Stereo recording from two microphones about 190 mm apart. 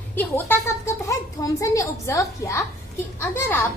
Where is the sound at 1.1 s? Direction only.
15° left (ahead or behind).